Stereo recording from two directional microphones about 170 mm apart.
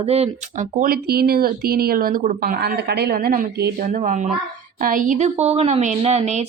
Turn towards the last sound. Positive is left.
turn(degrees=-40)  # may be behind; listen again after turning